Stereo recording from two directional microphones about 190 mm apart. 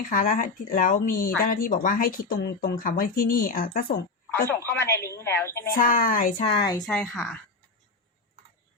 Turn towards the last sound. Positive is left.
turn(degrees=5)  # may be behind; listen again after turning